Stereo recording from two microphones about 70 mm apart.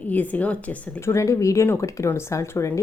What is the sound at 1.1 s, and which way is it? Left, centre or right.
Speech, left.